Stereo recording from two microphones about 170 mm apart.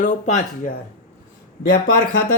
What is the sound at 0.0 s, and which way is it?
Speech, 45° left (ahead or behind).